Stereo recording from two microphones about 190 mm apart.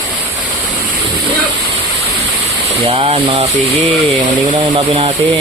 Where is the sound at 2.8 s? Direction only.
30° right (ahead or behind).